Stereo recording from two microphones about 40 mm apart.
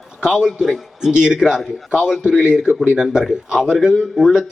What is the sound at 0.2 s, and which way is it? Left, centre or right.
A man's voice, centre.